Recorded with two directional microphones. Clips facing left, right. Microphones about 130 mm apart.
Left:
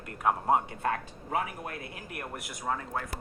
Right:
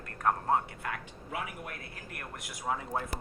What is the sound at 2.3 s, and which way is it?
Speech, centre (ahead or behind).